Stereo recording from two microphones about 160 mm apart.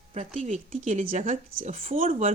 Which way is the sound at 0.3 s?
50° right (ahead or behind).